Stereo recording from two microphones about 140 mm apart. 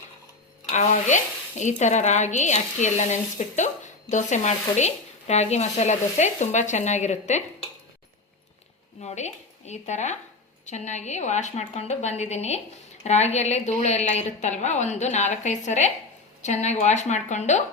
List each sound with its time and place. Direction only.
0.7 s a woman's voice: 55° left (ahead or behind)
9.0 s a woman's voice: 55° left (ahead or behind)